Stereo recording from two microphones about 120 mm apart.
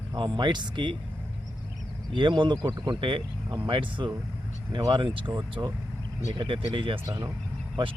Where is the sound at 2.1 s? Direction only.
40° right (ahead or behind).